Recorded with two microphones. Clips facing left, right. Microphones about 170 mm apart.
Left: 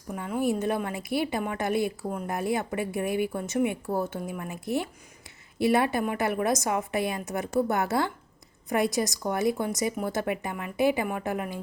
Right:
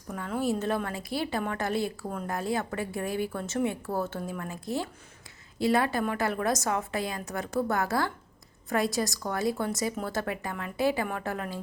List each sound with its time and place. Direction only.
0.1 s a woman's voice: 15° left (ahead or behind)